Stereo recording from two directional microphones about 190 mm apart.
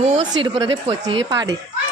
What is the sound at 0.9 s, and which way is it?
Speech, 20° right (ahead or behind).